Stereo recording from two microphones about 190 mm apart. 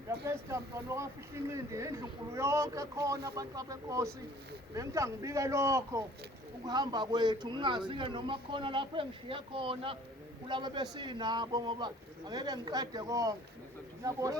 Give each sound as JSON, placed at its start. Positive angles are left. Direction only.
{"t": 0.3, "sound": "a man's voice", "side_deg": -15}